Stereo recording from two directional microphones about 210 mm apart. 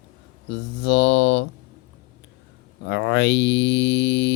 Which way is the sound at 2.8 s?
55° left (ahead or behind).